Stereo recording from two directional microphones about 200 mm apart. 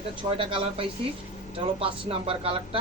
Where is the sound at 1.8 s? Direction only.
25° right (ahead or behind).